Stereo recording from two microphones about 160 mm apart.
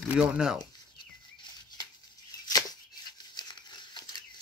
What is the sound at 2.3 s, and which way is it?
Tearing, 25° left (ahead or behind).